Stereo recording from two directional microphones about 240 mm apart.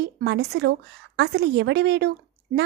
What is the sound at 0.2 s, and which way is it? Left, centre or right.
A woman's voice, right.